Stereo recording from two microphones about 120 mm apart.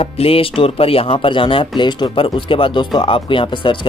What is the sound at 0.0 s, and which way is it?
Speech, 55° left (ahead or behind).